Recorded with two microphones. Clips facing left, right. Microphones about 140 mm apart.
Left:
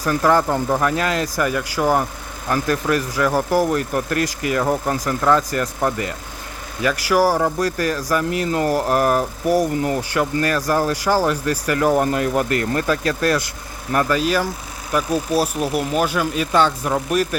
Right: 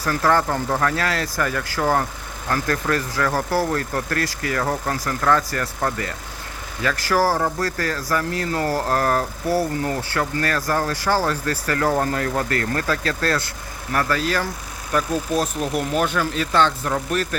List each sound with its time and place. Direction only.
0.0 s speech: 15° left (ahead or behind)